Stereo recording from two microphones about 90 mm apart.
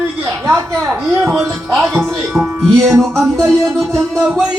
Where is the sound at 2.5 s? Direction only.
35° right (ahead or behind).